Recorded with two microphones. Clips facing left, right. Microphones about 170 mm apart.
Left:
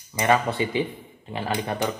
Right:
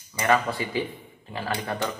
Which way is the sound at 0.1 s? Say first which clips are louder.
Left 2 dB; 20° left (ahead or behind).